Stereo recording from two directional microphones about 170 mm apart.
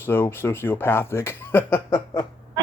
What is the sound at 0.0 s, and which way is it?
Speech, 15° left (ahead or behind).